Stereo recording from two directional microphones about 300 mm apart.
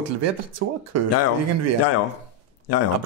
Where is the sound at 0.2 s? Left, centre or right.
Right.